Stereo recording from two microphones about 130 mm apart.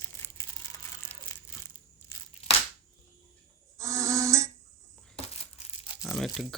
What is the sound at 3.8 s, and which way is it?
Insect, 25° right (ahead or behind).